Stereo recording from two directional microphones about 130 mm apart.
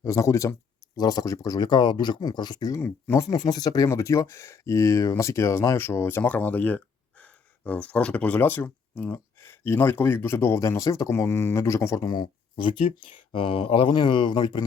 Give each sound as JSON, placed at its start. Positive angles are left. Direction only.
{"t": 0.0, "sound": "speech", "side_deg": 25}